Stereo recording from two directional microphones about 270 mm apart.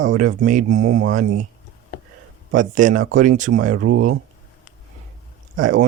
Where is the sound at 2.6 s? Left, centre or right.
Right.